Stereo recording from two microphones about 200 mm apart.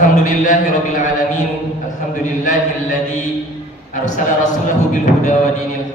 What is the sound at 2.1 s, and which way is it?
A man's voice, 40° left (ahead or behind).